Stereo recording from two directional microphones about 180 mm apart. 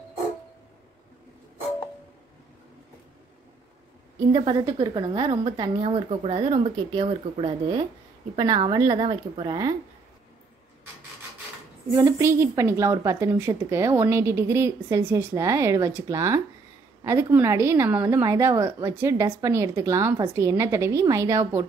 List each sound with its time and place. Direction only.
4.3 s a woman's voice: 25° right (ahead or behind)
11.9 s a woman's voice: 15° right (ahead or behind)